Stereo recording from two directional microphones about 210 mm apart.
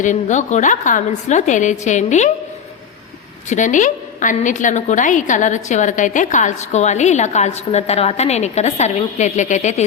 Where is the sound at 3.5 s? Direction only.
35° left (ahead or behind).